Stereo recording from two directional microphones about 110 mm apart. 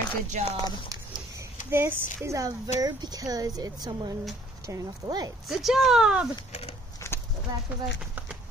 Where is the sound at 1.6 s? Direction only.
20° right (ahead or behind).